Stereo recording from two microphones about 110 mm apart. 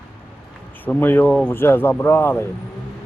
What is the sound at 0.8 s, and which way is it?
A man's voice, 20° left (ahead or behind).